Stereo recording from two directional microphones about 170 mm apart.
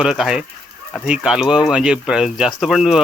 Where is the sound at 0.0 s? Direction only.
5° right (ahead or behind).